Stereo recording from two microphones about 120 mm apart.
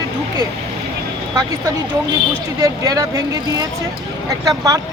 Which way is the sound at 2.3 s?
30° right (ahead or behind).